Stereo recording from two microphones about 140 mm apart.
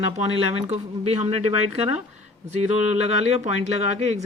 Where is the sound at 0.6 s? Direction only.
50° right (ahead or behind).